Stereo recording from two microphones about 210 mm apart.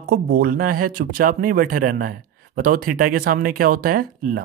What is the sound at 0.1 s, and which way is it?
Speech, 45° right (ahead or behind).